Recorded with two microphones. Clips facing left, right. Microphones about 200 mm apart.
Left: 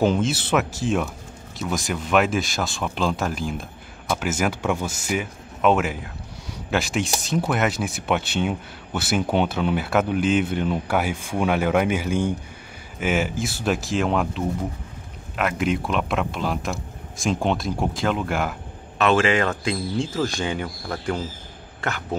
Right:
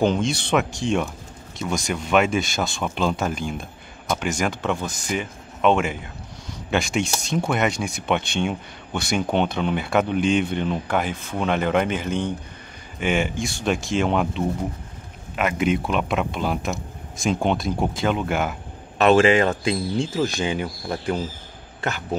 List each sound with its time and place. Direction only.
0.0 s speech: 5° left (ahead or behind)
18.9 s speech: 35° right (ahead or behind); by 21.2 s 15° right (ahead or behind)